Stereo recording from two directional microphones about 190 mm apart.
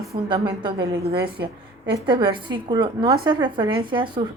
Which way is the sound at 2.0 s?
25° right (ahead or behind).